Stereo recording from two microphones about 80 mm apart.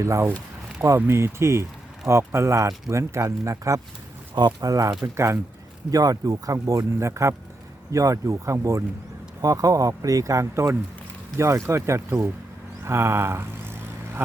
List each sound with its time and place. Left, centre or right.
0.0 s speech: right
4.4 s speech: right
5.0 s speech: right
5.9 s speech: right
12.8 s vehicle: right